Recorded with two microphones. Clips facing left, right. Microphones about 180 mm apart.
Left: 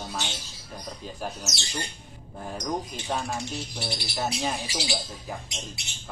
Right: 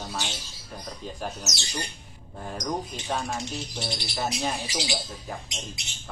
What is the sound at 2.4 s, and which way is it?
Speech, centre (ahead or behind).